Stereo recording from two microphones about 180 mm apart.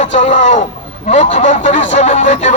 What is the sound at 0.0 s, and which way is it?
A man's voice, 40° left (ahead or behind).